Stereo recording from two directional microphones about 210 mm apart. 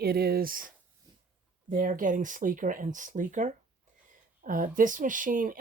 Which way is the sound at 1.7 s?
40° right (ahead or behind).